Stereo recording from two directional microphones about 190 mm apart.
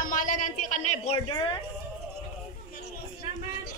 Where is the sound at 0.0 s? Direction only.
45° left (ahead or behind).